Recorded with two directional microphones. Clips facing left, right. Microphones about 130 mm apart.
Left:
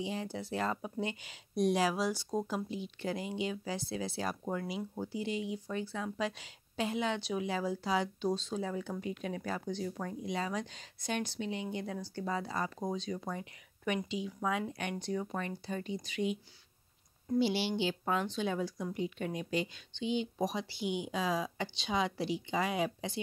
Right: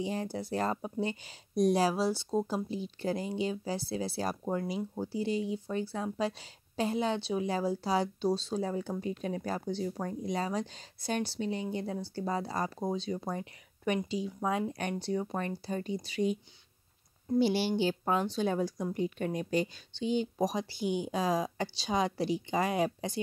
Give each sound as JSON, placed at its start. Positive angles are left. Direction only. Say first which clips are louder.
{"t": 0.0, "sound": "speech", "louder": "right 3 dB", "side_deg": -45}
{"t": 17.4, "sound": "speech", "louder": "right 4 dB", "side_deg": -45}